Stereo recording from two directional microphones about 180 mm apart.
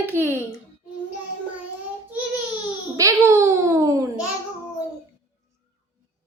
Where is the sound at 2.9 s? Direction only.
15° right (ahead or behind).